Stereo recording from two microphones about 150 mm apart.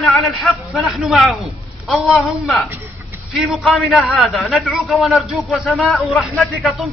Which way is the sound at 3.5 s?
Centre (ahead or behind).